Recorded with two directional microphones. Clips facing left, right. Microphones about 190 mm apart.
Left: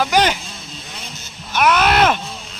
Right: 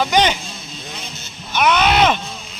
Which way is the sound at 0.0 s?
5° left (ahead or behind).